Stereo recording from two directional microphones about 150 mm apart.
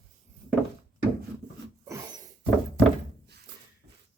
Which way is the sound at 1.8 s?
25° right (ahead or behind).